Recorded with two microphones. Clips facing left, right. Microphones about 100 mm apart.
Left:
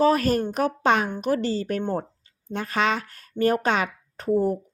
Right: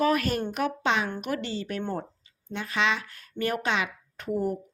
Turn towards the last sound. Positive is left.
turn(degrees=35)  # may be behind; listen again after turning